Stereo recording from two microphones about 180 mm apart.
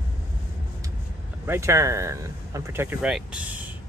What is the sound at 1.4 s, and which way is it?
Speech, 15° right (ahead or behind).